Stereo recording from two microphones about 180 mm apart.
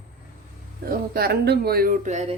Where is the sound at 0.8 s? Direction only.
55° right (ahead or behind); by 2.3 s 40° right (ahead or behind).